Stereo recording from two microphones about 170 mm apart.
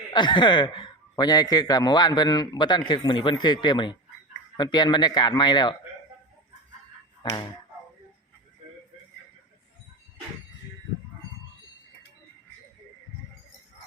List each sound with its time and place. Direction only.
0.1 s a man's voice: 25° left (ahead or behind)
7.2 s finger snapping: 25° left (ahead or behind)